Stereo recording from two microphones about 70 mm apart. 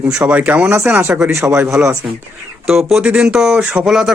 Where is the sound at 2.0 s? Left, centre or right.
Centre.